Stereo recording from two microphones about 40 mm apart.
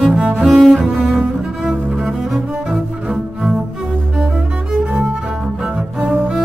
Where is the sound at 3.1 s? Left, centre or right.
Centre.